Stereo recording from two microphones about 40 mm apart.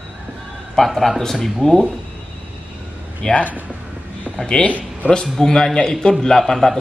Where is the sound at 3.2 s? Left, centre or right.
Centre.